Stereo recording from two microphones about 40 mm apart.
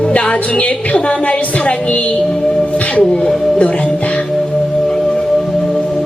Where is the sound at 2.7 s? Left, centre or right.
Left.